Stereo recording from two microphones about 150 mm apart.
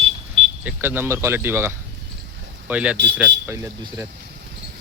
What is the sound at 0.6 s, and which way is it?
Speech, 15° right (ahead or behind).